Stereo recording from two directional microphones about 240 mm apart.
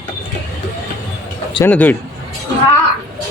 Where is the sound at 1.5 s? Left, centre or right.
Centre.